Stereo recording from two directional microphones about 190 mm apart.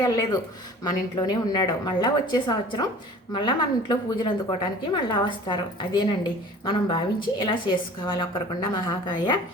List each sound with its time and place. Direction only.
0.0 s a woman's voice: 20° left (ahead or behind)